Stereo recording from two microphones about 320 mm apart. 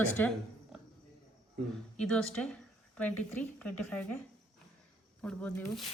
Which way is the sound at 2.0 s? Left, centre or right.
Centre.